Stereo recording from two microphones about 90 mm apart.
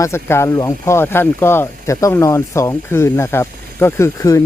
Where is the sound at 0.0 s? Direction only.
30° left (ahead or behind).